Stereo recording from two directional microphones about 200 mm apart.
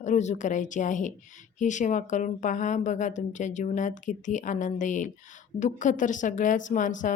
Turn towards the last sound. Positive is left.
turn(degrees=40)  # may be behind; listen again after turning